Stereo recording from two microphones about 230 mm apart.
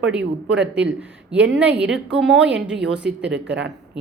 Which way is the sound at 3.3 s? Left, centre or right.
Right.